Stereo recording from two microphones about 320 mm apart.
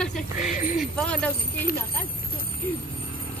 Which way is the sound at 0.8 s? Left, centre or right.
Centre.